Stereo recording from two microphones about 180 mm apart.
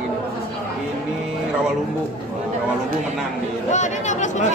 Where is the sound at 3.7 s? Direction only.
40° left (ahead or behind).